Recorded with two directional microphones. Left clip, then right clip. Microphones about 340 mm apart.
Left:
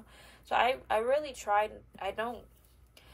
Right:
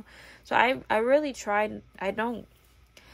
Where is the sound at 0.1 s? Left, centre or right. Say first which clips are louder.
Right 5 dB; right.